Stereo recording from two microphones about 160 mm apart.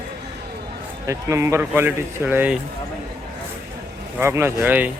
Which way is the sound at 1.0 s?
20° right (ahead or behind).